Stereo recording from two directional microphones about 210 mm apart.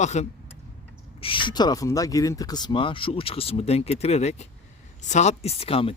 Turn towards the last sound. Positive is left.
turn(degrees=25)  # may be behind; listen again after turning